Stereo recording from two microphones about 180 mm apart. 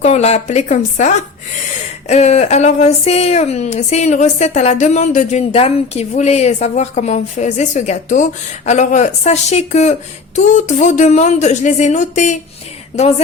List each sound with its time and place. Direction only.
0.0 s speech: 40° left (ahead or behind)